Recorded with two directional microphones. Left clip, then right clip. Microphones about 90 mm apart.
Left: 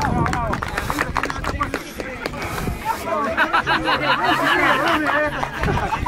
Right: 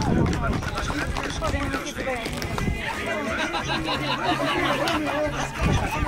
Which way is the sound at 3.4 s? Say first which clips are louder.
Left 8 dB; 35° left (ahead or behind).